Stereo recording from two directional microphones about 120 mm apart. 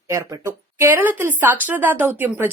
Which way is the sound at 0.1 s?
25° right (ahead or behind).